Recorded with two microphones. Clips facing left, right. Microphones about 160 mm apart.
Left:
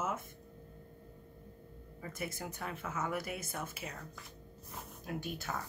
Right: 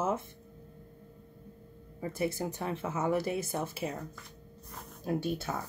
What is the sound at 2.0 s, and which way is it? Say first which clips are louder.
Speech: right 9 dB; 30° right (ahead or behind).